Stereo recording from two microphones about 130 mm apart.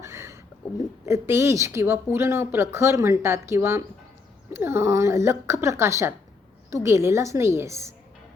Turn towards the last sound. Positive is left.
turn(degrees=-20)  # may be behind; listen again after turning